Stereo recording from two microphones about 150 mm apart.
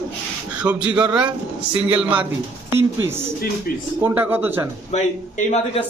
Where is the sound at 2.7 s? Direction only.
15° right (ahead or behind).